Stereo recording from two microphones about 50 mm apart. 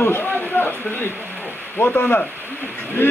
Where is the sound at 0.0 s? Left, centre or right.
Left.